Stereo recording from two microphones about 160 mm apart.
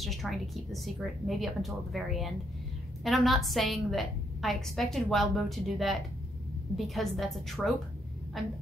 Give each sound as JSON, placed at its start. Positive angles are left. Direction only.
{"t": 0.0, "sound": "a woman's voice", "side_deg": 0}